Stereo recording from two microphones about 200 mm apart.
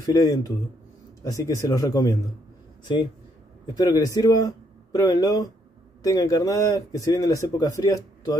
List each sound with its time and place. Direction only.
0.0 s speech: 15° left (ahead or behind)
3.7 s speech: 20° left (ahead or behind)